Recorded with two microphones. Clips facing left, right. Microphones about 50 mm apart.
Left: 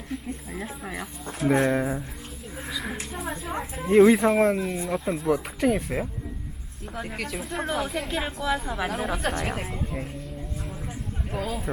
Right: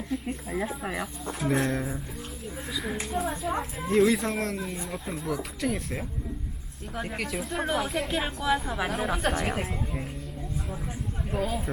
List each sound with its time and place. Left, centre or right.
0.5 s a woman's voice: centre
1.5 s speech: centre
2.6 s a sound: centre
3.1 s a woman's voice: centre
3.8 s speech: left
4.8 s speech: centre
6.9 s a woman's voice: centre
11.3 s a woman's voice: centre